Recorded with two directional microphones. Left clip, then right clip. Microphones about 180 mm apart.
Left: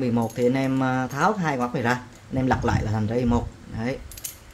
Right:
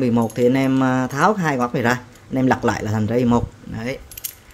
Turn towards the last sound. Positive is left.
turn(degrees=-30)  # may be behind; listen again after turning